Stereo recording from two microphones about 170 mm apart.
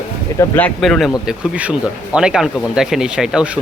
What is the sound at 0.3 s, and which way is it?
Speech, 10° left (ahead or behind).